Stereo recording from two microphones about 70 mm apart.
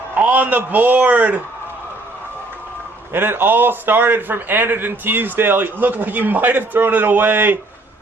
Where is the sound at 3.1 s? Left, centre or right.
Right.